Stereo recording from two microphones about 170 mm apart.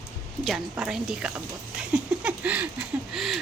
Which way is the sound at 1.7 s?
5° right (ahead or behind).